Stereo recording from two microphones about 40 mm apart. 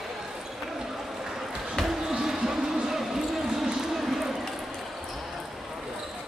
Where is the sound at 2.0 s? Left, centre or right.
Centre.